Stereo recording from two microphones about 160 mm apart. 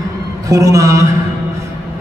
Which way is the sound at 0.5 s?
20° right (ahead or behind).